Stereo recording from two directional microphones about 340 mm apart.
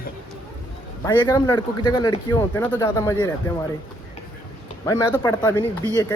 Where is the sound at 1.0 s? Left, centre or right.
Centre.